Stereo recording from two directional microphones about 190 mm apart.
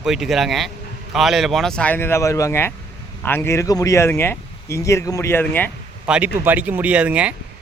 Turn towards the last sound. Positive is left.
turn(degrees=-5)  # may be behind; listen again after turning